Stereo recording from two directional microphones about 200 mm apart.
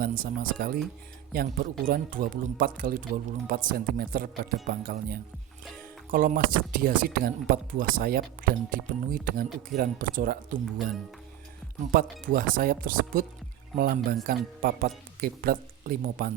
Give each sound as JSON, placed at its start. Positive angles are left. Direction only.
{"t": 0.0, "sound": "speech", "side_deg": -45}
{"t": 11.9, "sound": "speech", "side_deg": -45}